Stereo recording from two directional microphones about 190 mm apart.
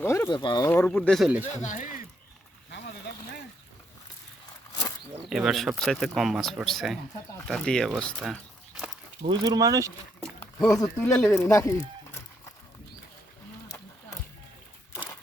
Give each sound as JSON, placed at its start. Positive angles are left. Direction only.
{"t": 0.0, "sound": "speech", "side_deg": 15}
{"t": 0.7, "sound": "speech", "side_deg": 10}
{"t": 1.6, "sound": "speech", "side_deg": 40}
{"t": 3.1, "sound": "a sound", "side_deg": 65}
{"t": 5.2, "sound": "speech", "side_deg": 0}
{"t": 9.3, "sound": "speech", "side_deg": -20}
{"t": 10.4, "sound": "speech", "side_deg": 15}
{"t": 13.7, "sound": "a sound", "side_deg": 15}